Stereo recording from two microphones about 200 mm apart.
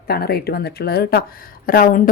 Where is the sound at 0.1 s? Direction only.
50° left (ahead or behind).